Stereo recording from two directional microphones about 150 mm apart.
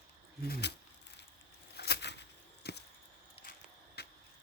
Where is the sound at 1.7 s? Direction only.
90° left.